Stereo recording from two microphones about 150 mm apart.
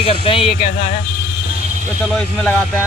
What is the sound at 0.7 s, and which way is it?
Speech, 60° left (ahead or behind).